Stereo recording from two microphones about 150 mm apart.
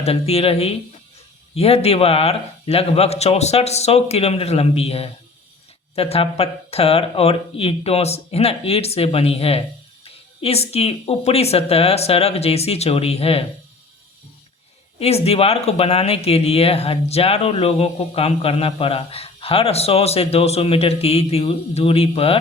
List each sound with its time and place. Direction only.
0.0 s a man's voice: 40° left (ahead or behind)
14.9 s speech: 40° left (ahead or behind)